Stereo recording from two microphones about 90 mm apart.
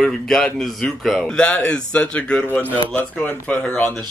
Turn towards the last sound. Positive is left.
turn(degrees=15)  # may be behind; listen again after turning